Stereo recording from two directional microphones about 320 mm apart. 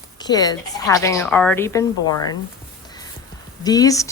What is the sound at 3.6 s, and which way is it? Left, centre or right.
Speech, centre.